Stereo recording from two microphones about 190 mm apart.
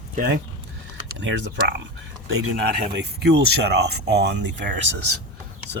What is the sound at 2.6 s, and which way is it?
Speech, 60° right (ahead or behind).